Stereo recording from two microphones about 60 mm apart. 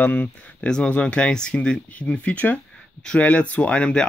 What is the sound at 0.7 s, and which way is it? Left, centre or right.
Speech, centre.